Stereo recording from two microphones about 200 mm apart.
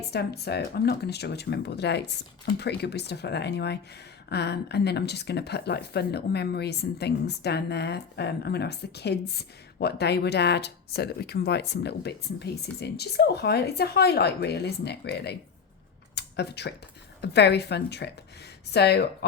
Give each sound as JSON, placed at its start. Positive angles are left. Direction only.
{"t": 0.1, "sound": "speech", "side_deg": 55}
{"t": 16.1, "sound": "a sound", "side_deg": 55}
{"t": 17.2, "sound": "speech", "side_deg": 55}